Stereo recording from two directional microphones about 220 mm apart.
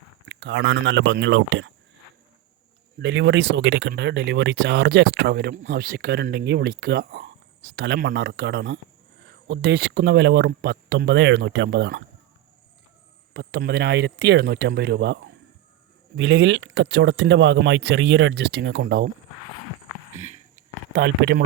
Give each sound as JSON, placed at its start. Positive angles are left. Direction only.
{"t": 0.3, "sound": "speech", "side_deg": -55}
{"t": 3.0, "sound": "speech", "side_deg": -55}
{"t": 13.3, "sound": "speech", "side_deg": -45}
{"t": 20.1, "sound": "a sound", "side_deg": -30}
{"t": 20.9, "sound": "speech", "side_deg": -50}